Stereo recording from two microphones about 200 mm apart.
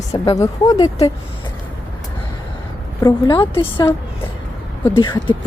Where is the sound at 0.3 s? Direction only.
15° left (ahead or behind).